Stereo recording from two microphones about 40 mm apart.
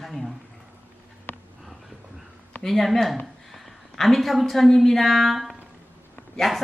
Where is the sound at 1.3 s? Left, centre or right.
Left.